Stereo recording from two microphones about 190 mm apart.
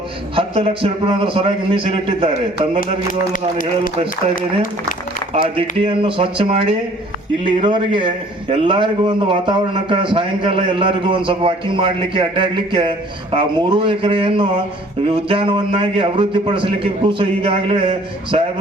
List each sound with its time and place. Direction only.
0.3 s a man's voice: 30° right (ahead or behind)
4.4 s speech: 45° left (ahead or behind)
5.3 s a man's voice: 30° right (ahead or behind)